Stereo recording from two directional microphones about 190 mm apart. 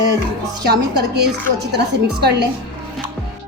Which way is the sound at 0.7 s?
60° right (ahead or behind).